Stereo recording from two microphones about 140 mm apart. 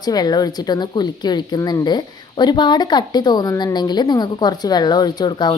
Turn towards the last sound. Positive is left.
turn(degrees=30)  # may be behind; listen again after turning